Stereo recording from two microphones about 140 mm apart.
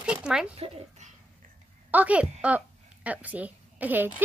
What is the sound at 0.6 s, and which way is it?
Speech, 45° right (ahead or behind).